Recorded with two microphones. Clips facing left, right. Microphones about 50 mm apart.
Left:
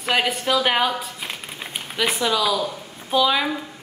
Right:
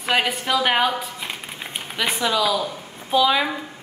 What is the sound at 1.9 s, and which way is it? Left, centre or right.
Speech, centre.